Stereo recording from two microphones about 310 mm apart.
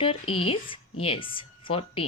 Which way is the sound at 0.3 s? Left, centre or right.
Centre.